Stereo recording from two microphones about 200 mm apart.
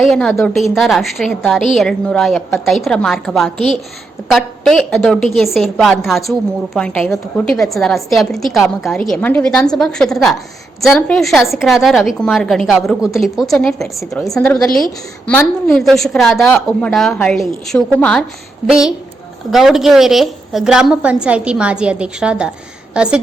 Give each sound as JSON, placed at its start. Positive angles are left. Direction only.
{"t": 0.0, "sound": "a woman's voice", "side_deg": 5}